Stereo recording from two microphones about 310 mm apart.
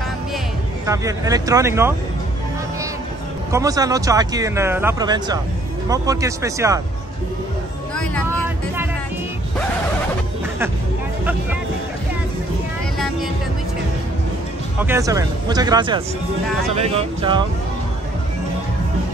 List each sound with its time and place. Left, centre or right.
0.8 s speech: centre
3.5 s speech: centre
7.9 s music: centre
14.8 s speech: centre